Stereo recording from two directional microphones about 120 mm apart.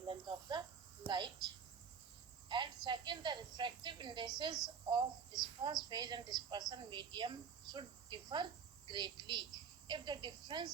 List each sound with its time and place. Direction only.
0.0 s a woman's voice: 40° right (ahead or behind)
2.5 s a woman's voice: 40° right (ahead or behind)